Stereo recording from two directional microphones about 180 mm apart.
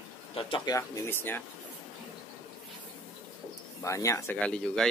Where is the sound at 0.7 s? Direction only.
15° left (ahead or behind).